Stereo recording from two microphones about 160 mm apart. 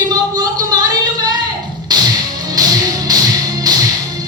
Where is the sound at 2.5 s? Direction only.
25° right (ahead or behind).